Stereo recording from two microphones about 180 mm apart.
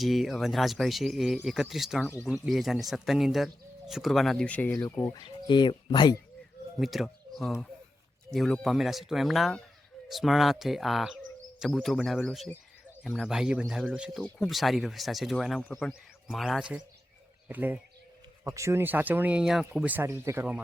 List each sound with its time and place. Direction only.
0.0 s speech: centre (ahead or behind); by 6.2 s 25° left (ahead or behind)
6.7 s speech: centre (ahead or behind)